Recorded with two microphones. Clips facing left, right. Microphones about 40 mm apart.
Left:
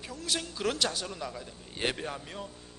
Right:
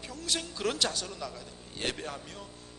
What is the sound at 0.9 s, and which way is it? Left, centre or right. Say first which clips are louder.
A man's voice: left 1 dB; centre.